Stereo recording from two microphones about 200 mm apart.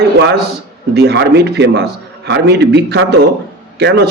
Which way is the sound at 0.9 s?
55° right (ahead or behind).